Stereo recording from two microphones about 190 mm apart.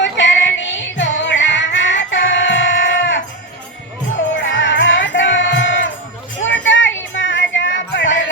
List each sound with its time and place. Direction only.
0.0 s music: 70° left (ahead or behind)
4.4 s music: 80° left
6.4 s a sound: 75° left (ahead or behind)
7.1 s music: 75° left (ahead or behind)